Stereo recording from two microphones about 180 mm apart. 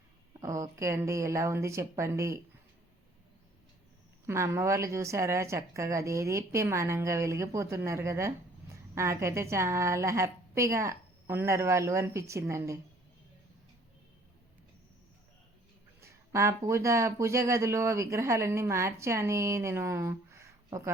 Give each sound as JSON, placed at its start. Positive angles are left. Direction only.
{"t": 0.3, "sound": "speech", "side_deg": -20}
{"t": 4.3, "sound": "speech", "side_deg": -15}
{"t": 16.0, "sound": "speech", "side_deg": -15}